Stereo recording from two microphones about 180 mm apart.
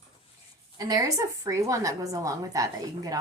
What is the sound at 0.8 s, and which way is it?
A woman's voice, 20° right (ahead or behind).